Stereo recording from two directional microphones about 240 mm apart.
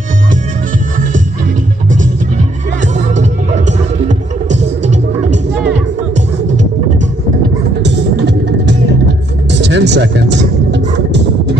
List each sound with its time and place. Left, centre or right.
4.5 s music: right
7.8 s music: right